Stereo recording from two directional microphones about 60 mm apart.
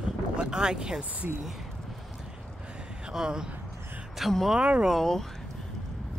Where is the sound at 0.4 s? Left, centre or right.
Centre.